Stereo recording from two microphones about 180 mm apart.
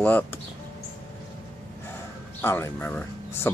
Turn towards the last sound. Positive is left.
turn(degrees=10)  # may be behind; listen again after turning